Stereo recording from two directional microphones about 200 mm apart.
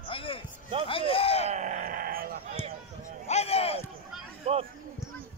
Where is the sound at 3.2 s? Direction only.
30° left (ahead or behind).